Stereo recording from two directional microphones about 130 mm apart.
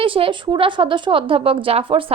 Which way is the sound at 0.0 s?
45° right (ahead or behind).